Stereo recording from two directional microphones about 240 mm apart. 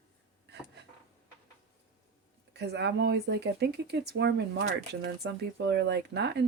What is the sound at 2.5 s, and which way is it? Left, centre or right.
Speech, right.